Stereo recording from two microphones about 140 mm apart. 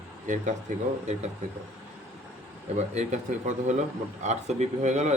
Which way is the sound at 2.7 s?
55° right (ahead or behind).